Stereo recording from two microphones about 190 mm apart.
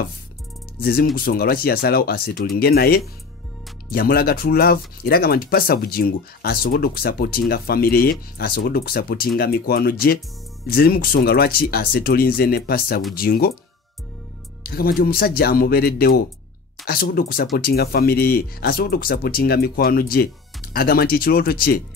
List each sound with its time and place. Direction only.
0.7 s speech: 55° left (ahead or behind)
14.6 s speech: 50° left (ahead or behind)